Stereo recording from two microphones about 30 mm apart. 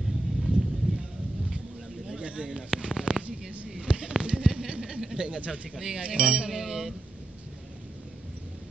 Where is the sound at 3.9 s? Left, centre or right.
Right.